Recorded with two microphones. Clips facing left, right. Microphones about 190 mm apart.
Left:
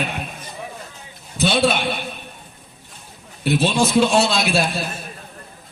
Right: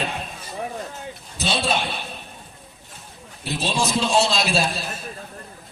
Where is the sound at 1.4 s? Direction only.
60° left (ahead or behind).